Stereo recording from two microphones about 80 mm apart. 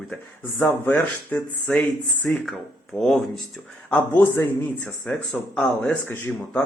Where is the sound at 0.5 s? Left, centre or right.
Left.